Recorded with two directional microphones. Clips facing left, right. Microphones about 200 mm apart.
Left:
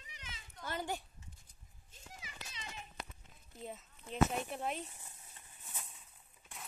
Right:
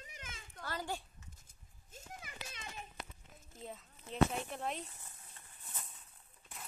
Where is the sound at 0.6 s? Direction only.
20° left (ahead or behind).